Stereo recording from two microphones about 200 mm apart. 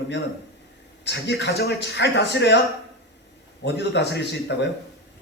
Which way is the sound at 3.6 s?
60° left (ahead or behind).